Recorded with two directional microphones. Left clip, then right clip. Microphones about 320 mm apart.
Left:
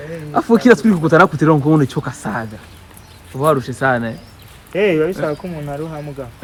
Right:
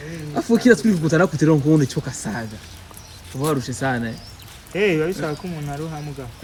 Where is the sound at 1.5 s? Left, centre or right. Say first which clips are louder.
Left 4 dB; left.